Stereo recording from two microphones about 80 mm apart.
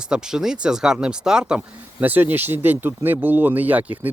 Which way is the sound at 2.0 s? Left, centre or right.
Right.